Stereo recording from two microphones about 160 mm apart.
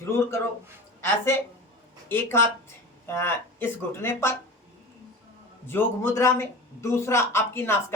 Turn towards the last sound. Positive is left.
turn(degrees=15)  # may be behind; listen again after turning